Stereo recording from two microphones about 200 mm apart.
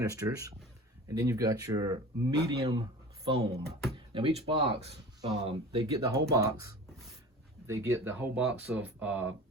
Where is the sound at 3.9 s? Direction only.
25° right (ahead or behind).